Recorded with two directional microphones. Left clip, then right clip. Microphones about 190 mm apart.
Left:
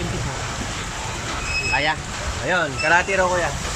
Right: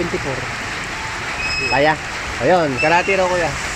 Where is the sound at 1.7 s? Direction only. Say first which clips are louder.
Right 7 dB; 30° right (ahead or behind).